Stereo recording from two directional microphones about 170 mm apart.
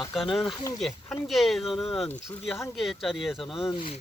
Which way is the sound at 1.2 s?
Centre (ahead or behind).